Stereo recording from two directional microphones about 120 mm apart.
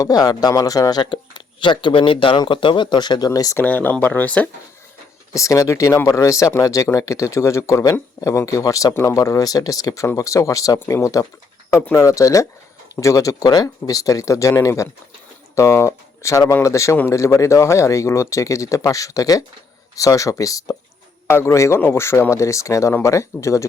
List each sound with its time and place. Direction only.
0.0 s speech: 30° left (ahead or behind)
3.6 s speech: 15° left (ahead or behind)
5.3 s speech: 25° left (ahead or behind)